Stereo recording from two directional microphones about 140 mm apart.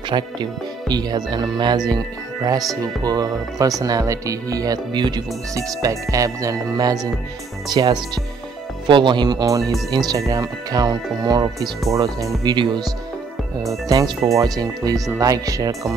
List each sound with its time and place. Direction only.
0.1 s speech: 30° right (ahead or behind)